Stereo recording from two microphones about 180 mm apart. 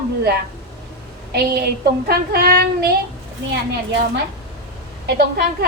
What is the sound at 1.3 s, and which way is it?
Speech, 60° right (ahead or behind).